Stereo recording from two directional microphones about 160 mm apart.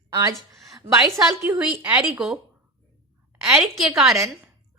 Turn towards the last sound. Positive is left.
turn(degrees=0)  # may be behind; listen again after turning